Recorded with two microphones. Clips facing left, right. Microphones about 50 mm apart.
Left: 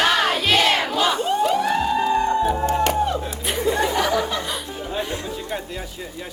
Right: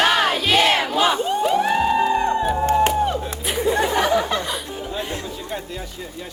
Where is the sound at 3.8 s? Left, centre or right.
Right.